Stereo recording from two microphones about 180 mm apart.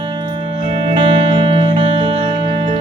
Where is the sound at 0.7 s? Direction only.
30° right (ahead or behind).